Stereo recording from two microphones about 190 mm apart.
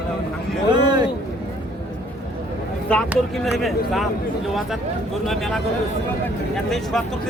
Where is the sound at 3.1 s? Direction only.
Centre (ahead or behind).